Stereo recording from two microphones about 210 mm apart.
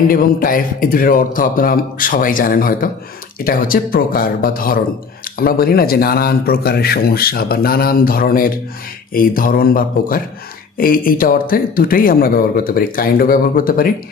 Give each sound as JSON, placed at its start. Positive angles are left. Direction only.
{"t": 0.1, "sound": "speech", "side_deg": 40}